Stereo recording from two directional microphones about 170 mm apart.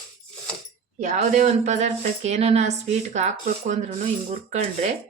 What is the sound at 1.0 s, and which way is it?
Speech, 40° right (ahead or behind).